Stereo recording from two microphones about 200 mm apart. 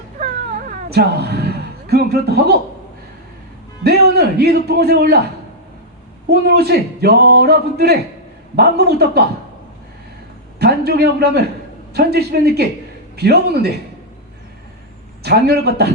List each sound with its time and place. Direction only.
0.9 s a man's voice: 55° right (ahead or behind)
3.8 s a man's voice: 50° right (ahead or behind)
6.2 s a man's voice: 55° right (ahead or behind)
10.6 s a man's voice: 55° right (ahead or behind)
15.2 s a man's voice: 55° right (ahead or behind)